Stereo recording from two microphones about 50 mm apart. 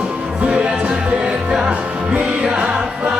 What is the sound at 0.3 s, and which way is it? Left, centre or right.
Music, right.